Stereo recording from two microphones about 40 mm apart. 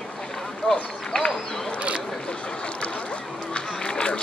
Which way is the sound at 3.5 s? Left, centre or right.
Left.